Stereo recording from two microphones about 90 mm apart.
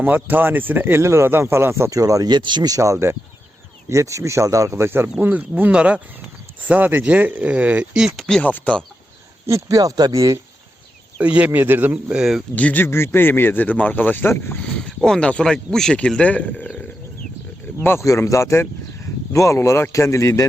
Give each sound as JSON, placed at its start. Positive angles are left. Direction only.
{"t": 0.0, "sound": "speech", "side_deg": -20}
{"t": 2.6, "sound": "speech", "side_deg": -35}
{"t": 8.3, "sound": "speech", "side_deg": 15}
{"t": 9.5, "sound": "speech", "side_deg": -40}
{"t": 11.2, "sound": "speech", "side_deg": -15}
{"t": 12.1, "sound": "speech", "side_deg": -5}
{"t": 12.5, "sound": "speech", "side_deg": 20}
{"t": 14.8, "sound": "speech", "side_deg": 10}
{"t": 18.0, "sound": "speech", "side_deg": 35}